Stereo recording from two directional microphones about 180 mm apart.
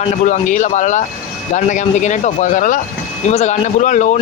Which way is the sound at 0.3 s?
45° left (ahead or behind).